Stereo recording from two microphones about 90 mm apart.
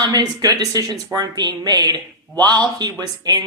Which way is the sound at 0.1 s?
45° right (ahead or behind).